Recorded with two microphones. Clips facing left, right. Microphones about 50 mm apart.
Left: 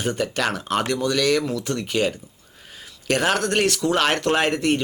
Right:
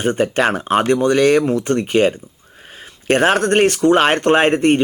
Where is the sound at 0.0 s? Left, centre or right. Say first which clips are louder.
Right 7 dB; right.